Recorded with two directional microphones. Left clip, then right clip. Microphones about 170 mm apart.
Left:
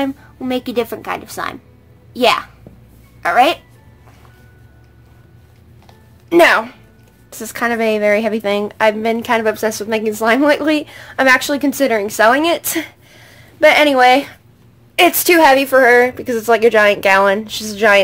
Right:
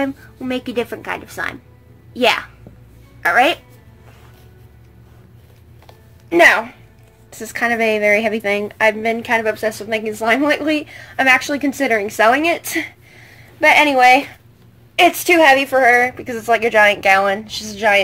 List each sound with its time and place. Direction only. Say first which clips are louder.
0.0 s a woman's voice: left 1 dB; 20° left (ahead or behind)
6.2 s a woman's voice: left 1 dB; 25° left (ahead or behind)